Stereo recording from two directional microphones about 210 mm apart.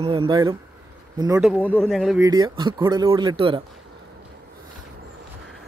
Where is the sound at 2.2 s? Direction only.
20° right (ahead or behind).